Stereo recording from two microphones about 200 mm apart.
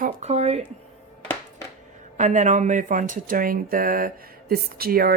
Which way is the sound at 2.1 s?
40° right (ahead or behind).